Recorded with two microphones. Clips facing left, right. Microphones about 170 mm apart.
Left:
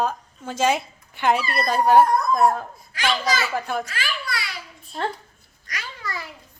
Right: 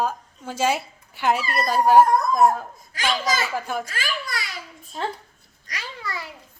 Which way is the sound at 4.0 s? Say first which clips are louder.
Even; 45° right (ahead or behind).